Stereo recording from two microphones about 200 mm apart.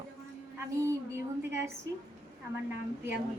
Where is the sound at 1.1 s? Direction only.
15° right (ahead or behind).